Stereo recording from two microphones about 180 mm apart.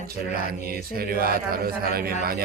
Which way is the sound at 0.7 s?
55° right (ahead or behind).